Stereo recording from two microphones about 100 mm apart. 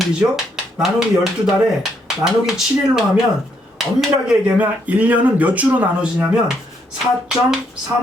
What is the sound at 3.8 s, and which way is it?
Speech, 5° right (ahead or behind).